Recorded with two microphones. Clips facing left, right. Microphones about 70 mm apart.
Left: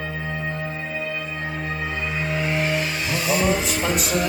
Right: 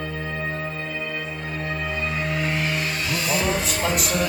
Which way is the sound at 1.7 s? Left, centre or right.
Centre.